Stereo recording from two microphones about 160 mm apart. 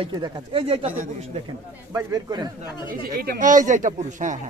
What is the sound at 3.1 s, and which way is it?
Speech, 65° right (ahead or behind).